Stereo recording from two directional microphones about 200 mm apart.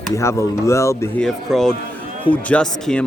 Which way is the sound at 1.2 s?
Centre (ahead or behind).